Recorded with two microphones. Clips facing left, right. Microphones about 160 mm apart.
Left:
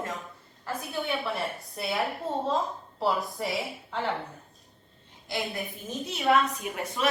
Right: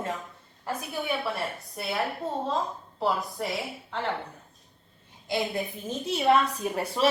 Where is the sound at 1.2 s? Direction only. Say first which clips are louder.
Even; centre (ahead or behind).